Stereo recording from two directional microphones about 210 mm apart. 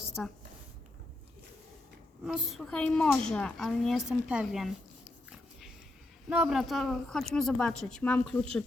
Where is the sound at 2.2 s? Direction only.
Centre (ahead or behind).